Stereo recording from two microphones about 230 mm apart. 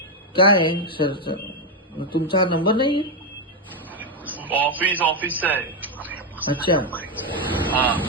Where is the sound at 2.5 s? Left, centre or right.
Left.